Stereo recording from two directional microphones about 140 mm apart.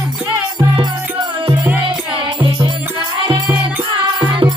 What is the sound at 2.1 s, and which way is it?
Music, 35° right (ahead or behind).